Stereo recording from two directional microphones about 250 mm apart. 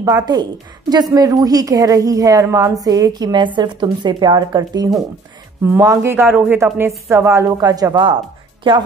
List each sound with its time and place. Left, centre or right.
0.0 s a woman's voice: centre